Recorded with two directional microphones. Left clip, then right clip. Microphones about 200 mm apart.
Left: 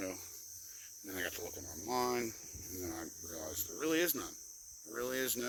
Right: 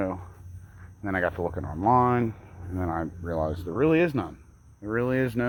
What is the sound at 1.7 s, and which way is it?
Speech, 25° left (ahead or behind).